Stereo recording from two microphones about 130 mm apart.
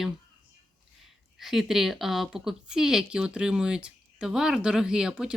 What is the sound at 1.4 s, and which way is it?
Speech, centre (ahead or behind).